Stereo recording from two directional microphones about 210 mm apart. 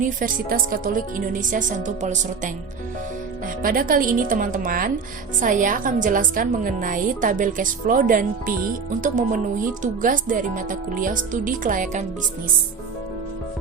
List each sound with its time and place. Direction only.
0.0 s a woman's voice: 40° right (ahead or behind)
3.6 s a woman's voice: 40° right (ahead or behind)